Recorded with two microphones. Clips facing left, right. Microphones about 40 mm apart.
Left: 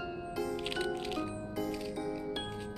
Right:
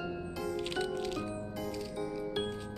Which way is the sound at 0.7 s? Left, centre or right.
Centre.